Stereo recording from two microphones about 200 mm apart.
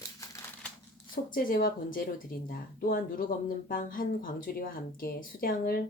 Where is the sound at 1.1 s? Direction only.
45° left (ahead or behind).